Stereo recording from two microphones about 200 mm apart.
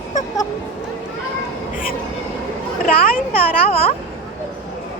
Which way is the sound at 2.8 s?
45° left (ahead or behind).